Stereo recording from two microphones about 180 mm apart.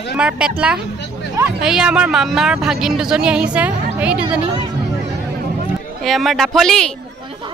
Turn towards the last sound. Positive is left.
turn(degrees=5)  # may be behind; listen again after turning